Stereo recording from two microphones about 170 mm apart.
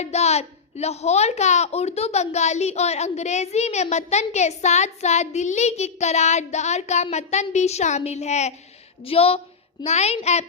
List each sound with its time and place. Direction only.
0.0 s a woman's voice: 40° left (ahead or behind)